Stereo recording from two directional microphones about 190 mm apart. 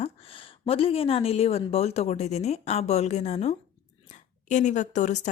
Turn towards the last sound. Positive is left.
turn(degrees=40)  # may be behind; listen again after turning